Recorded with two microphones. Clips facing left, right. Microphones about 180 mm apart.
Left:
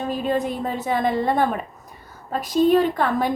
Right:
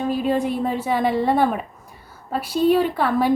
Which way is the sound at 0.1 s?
10° right (ahead or behind).